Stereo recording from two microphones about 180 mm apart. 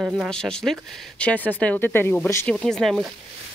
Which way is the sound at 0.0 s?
Centre (ahead or behind).